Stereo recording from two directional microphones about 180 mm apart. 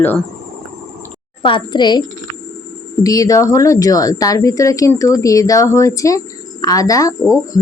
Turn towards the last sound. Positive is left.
turn(degrees=20)  # may be behind; listen again after turning